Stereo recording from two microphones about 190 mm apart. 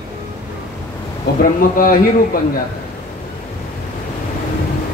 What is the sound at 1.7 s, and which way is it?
Speech, 45° left (ahead or behind).